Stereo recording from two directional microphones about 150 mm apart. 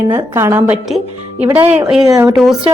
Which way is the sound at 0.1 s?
20° right (ahead or behind).